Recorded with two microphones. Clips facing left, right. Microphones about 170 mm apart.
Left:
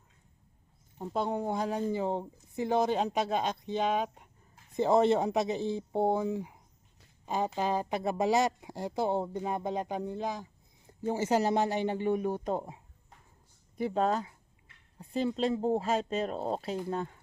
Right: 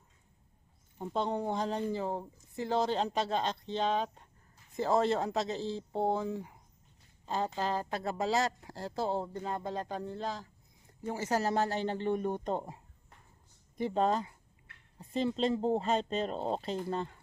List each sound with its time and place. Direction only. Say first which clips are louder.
0.9 s speech: left 1 dB; 5° left (ahead or behind)